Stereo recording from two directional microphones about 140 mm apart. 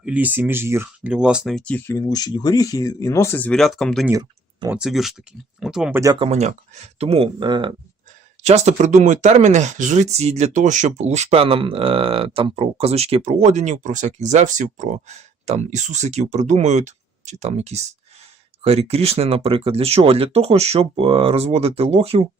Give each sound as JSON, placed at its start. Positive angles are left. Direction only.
{"t": 0.0, "sound": "speech", "side_deg": -10}
{"t": 4.1, "sound": "speech", "side_deg": -25}
{"t": 4.7, "sound": "speech", "side_deg": -5}
{"t": 5.9, "sound": "speech", "side_deg": -25}
{"t": 6.1, "sound": "speech", "side_deg": -50}
{"t": 8.4, "sound": "speech", "side_deg": -55}